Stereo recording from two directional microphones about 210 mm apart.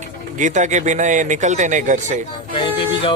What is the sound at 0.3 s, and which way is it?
Speech, 35° right (ahead or behind).